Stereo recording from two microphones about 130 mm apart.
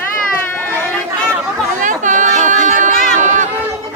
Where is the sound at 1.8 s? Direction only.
75° right (ahead or behind).